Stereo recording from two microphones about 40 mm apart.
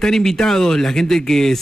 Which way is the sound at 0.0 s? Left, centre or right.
Centre.